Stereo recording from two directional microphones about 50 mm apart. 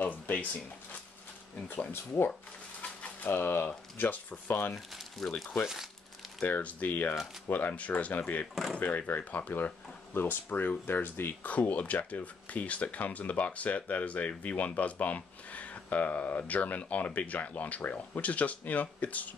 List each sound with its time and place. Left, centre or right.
0.0 s a sound: left
1.7 s speech: left
2.8 s typewriter: left
3.3 s speech: left
3.6 s speech: left
4.7 s speech: centre
6.4 s speech: left
11.4 s speech: left